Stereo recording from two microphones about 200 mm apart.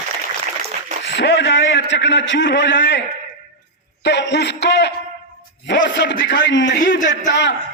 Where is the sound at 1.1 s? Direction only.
60° left (ahead or behind).